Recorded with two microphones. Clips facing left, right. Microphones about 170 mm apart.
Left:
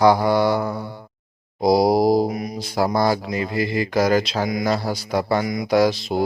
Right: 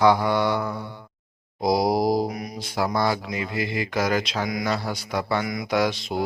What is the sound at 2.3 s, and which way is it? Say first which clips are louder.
Mantra: left 5 dB; 25° left (ahead or behind).